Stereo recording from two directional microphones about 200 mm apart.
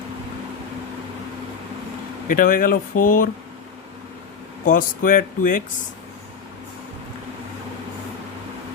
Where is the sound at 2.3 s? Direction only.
45° left (ahead or behind).